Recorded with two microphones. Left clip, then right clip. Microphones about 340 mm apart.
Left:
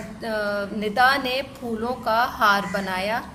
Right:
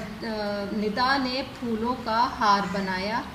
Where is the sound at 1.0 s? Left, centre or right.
Left.